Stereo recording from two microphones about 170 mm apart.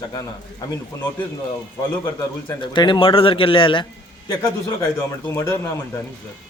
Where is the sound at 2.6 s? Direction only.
30° left (ahead or behind).